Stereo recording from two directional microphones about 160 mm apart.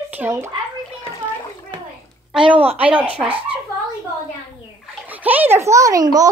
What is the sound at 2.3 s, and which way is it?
Speech, 10° right (ahead or behind).